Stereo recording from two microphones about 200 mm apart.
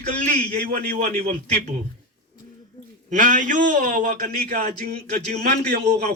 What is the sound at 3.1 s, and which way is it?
A man's voice, 40° right (ahead or behind).